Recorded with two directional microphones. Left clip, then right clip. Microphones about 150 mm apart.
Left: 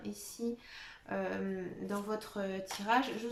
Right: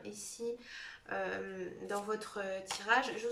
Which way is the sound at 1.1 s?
30° left (ahead or behind).